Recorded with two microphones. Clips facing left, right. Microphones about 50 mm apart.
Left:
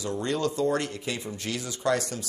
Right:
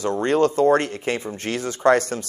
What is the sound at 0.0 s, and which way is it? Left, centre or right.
A man's voice, right.